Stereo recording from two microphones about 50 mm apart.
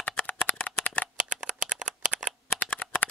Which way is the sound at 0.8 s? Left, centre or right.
Left.